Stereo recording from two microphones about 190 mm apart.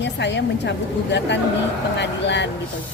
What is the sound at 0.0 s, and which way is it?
A woman's voice, 65° left (ahead or behind).